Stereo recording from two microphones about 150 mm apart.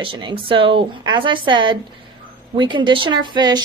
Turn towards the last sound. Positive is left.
turn(degrees=-30)  # may be behind; listen again after turning